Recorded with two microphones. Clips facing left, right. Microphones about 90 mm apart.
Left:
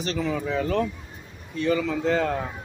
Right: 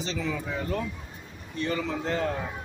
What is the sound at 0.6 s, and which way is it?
Speech, 90° left.